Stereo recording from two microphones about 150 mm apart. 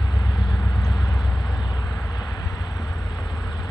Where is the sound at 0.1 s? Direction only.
25° left (ahead or behind).